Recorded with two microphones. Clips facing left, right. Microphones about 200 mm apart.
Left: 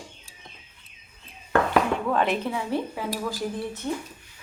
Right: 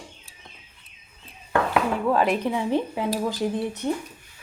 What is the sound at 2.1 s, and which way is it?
Speech, 5° right (ahead or behind).